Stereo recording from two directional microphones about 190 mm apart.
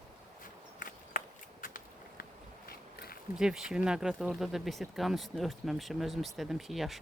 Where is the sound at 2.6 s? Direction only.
55° left (ahead or behind).